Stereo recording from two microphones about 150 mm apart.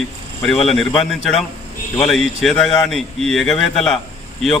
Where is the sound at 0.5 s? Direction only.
45° left (ahead or behind).